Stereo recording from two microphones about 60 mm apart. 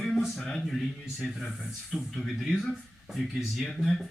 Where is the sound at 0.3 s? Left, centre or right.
Centre.